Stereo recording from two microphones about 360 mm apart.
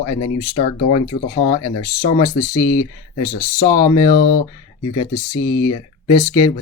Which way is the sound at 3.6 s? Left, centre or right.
Centre.